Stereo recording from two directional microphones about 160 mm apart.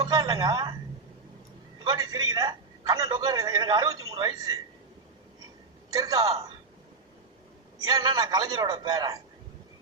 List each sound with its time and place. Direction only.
0.0 s a woman's voice: 25° right (ahead or behind)
1.8 s a man's voice: 30° right (ahead or behind)
5.9 s a man's voice: 20° right (ahead or behind)
7.9 s a man's voice: 25° right (ahead or behind)